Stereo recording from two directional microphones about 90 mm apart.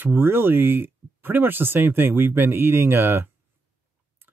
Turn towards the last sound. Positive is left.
turn(degrees=-25)  # may be behind; listen again after turning